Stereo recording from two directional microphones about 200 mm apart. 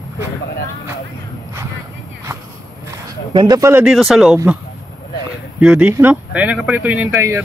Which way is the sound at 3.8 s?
Centre (ahead or behind).